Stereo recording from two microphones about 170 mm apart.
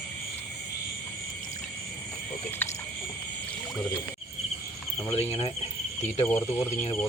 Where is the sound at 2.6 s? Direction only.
10° left (ahead or behind).